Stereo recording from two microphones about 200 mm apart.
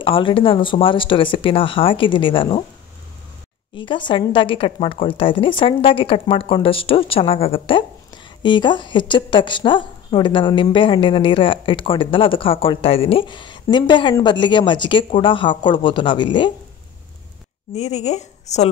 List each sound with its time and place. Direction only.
0.0 s a woman's voice: 25° left (ahead or behind)
3.7 s a woman's voice: 25° left (ahead or behind)
17.7 s speech: 35° left (ahead or behind)